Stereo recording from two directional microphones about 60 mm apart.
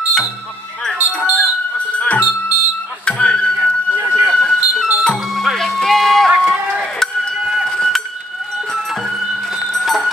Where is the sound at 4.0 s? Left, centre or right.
Right.